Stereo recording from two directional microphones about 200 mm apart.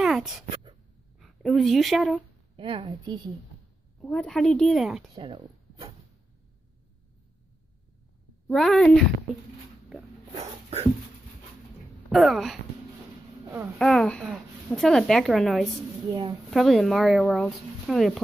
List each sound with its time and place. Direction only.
0.0 s a sound: centre (ahead or behind)
1.2 s speech: centre (ahead or behind)
2.5 s a woman's voice: 25° right (ahead or behind)
4.0 s a child's voice: 5° left (ahead or behind)
5.1 s speech: 25° right (ahead or behind)
8.5 s a child's voice: centre (ahead or behind)
10.3 s a sound: 30° right (ahead or behind)
12.1 s a child's voice: centre (ahead or behind)
13.7 s a child's voice: 5° left (ahead or behind)
16.1 s a woman's voice: 20° right (ahead or behind)
16.4 s a child's voice: centre (ahead or behind)